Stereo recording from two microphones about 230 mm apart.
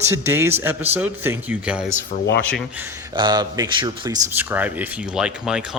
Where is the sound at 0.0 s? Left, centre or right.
Centre.